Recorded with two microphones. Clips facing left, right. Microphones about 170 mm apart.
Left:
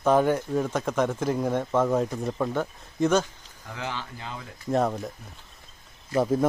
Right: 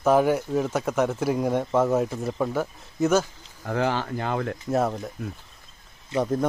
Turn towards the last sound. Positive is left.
turn(degrees=5)  # may be behind; listen again after turning